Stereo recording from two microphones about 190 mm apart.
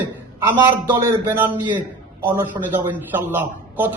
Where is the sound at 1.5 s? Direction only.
25° right (ahead or behind).